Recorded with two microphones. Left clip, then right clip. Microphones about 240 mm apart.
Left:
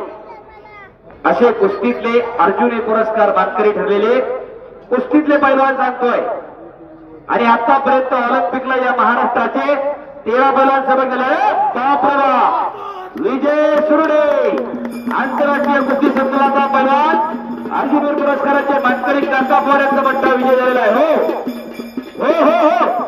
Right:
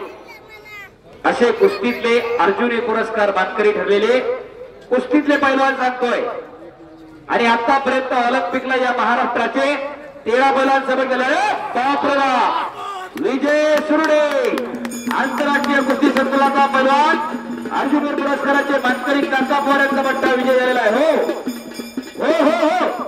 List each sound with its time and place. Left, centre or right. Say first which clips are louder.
1.2 s speech: left 3 dB; left
7.2 s speech: left 3 dB; left
22.2 s speech: left 4 dB; left